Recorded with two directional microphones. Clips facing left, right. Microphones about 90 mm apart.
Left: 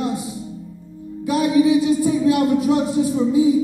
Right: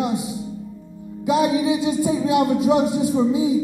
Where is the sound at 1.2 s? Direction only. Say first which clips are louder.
Left 2 dB; 20° right (ahead or behind).